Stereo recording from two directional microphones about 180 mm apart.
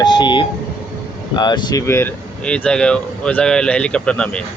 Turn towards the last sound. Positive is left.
turn(degrees=5)  # may be behind; listen again after turning